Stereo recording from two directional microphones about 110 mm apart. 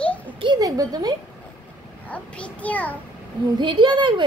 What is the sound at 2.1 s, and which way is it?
Speech, 15° left (ahead or behind).